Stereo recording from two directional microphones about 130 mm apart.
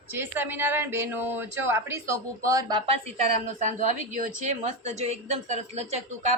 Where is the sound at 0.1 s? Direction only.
15° right (ahead or behind).